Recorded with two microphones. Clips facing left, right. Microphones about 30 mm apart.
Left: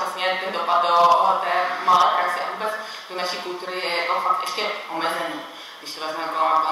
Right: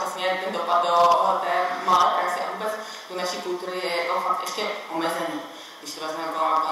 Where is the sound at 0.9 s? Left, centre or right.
Centre.